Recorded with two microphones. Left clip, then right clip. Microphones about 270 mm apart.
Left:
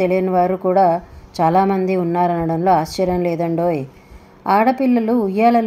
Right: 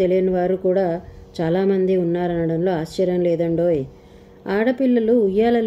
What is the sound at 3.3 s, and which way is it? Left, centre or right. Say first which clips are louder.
A woman's voice: even; left.